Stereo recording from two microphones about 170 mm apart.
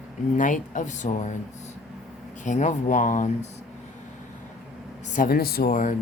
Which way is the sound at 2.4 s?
45° left (ahead or behind).